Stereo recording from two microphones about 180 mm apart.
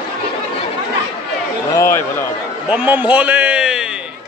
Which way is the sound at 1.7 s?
15° left (ahead or behind).